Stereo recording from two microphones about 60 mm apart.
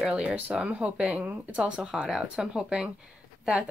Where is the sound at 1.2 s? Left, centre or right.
Right.